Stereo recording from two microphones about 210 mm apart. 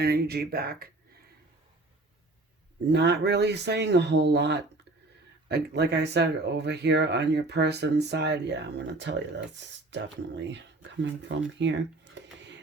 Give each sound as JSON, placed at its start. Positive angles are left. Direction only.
{"t": 0.0, "sound": "speech", "side_deg": -50}
{"t": 2.9, "sound": "speech", "side_deg": -55}